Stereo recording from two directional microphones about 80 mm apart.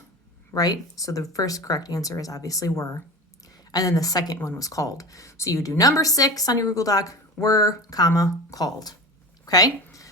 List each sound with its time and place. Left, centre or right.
0.5 s speech: left